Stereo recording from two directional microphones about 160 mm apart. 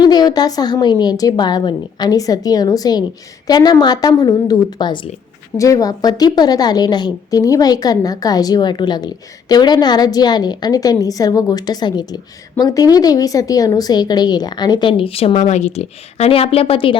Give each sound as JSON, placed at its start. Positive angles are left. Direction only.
{"t": 0.0, "sound": "a woman's voice", "side_deg": 25}